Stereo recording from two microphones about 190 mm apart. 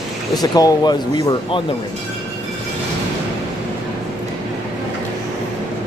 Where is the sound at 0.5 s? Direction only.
20° left (ahead or behind).